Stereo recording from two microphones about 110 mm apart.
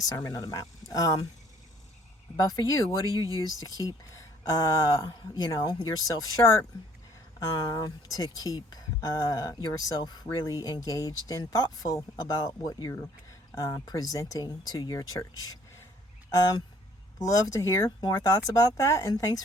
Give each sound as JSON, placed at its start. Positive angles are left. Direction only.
{"t": 0.2, "sound": "speech", "side_deg": 30}
{"t": 2.3, "sound": "speech", "side_deg": 35}
{"t": 3.1, "sound": "speech", "side_deg": -35}
{"t": 3.3, "sound": "speech", "side_deg": 35}